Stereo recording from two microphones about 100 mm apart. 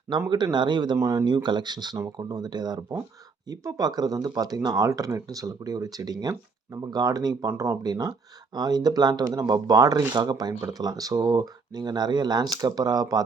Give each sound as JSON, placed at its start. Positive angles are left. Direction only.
{"t": 0.3, "sound": "speech", "side_deg": -45}
{"t": 0.9, "sound": "speech", "side_deg": -30}
{"t": 1.2, "sound": "speech", "side_deg": -45}